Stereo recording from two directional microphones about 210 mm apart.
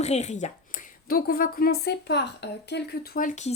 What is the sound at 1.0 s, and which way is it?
A woman's voice, 45° left (ahead or behind).